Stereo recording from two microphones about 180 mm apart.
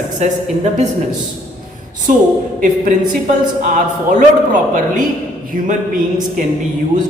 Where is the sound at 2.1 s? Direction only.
45° right (ahead or behind).